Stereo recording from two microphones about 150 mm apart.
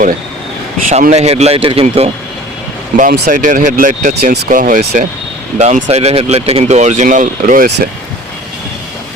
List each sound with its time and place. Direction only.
0.9 s speech: 50° right (ahead or behind)
2.9 s speech: 70° right (ahead or behind)
5.5 s speech: 50° right (ahead or behind)